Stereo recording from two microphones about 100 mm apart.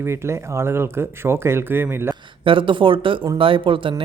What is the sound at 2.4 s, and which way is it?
Speech, 60° right (ahead or behind).